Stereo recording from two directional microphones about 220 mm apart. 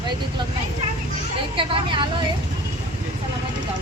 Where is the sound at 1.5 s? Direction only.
25° right (ahead or behind).